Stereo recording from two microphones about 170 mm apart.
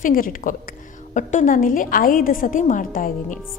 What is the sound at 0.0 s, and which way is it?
A woman's voice, 55° left (ahead or behind).